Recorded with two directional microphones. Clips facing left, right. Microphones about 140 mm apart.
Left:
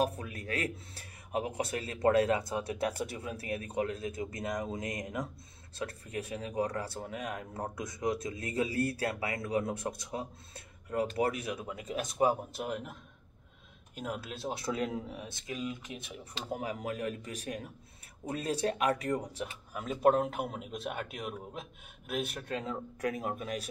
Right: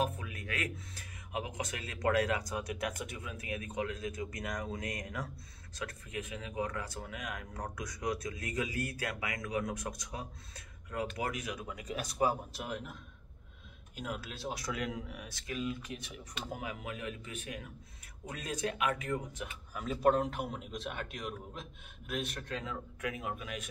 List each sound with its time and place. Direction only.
0.0 s speech: 35° left (ahead or behind)
12.5 s a man's voice: centre (ahead or behind)
14.1 s a man's voice: centre (ahead or behind)
14.5 s speech: 30° left (ahead or behind)
16.3 s speech: 35° left (ahead or behind)
19.7 s a man's voice: 5° left (ahead or behind)
22.6 s speech: 35° left (ahead or behind)